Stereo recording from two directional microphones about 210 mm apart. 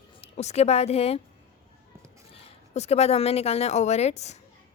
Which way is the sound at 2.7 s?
30° left (ahead or behind).